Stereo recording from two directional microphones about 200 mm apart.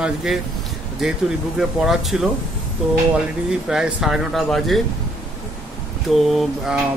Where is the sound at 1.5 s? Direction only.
Centre (ahead or behind).